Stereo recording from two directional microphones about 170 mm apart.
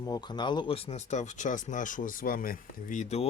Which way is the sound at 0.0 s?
25° left (ahead or behind).